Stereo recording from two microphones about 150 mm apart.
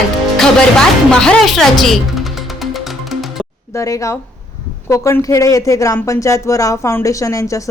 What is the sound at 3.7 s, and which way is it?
Speech, 20° left (ahead or behind).